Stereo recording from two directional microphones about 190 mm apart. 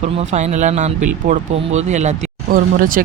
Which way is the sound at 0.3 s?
35° right (ahead or behind).